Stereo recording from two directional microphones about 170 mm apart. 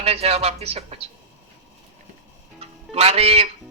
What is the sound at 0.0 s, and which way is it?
Speech, 35° right (ahead or behind).